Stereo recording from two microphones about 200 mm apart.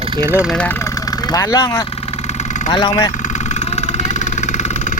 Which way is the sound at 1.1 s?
20° left (ahead or behind).